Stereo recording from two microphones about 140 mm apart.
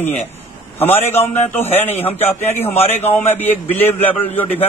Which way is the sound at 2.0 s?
15° left (ahead or behind).